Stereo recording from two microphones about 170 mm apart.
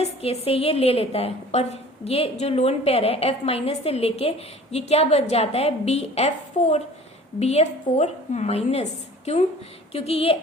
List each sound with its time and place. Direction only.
0.0 s a woman's voice: 35° left (ahead or behind)